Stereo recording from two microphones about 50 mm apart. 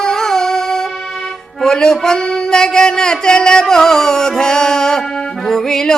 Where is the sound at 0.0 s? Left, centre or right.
Centre.